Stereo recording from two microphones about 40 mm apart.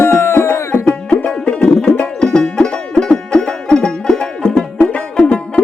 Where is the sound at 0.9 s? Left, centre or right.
Left.